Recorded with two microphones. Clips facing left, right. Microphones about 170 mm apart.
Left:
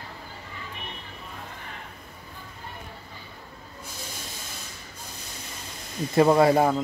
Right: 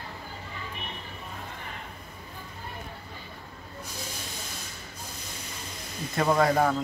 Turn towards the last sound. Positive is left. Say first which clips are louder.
# left 4 dB
turn(degrees=25)  # may be behind; listen again after turning